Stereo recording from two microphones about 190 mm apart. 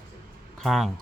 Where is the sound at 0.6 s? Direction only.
Centre (ahead or behind).